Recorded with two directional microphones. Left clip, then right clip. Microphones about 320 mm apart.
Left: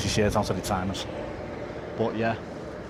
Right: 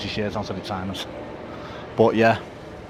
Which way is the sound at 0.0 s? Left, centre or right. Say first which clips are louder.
Left 2 dB; centre.